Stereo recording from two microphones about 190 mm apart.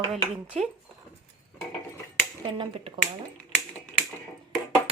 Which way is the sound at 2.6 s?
25° right (ahead or behind).